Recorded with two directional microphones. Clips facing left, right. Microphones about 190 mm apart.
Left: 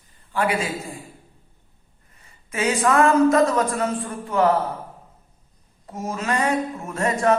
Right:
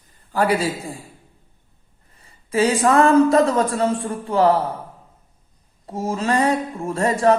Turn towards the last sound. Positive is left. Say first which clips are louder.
# right 3 dB
turn(degrees=-35)  # may be behind; listen again after turning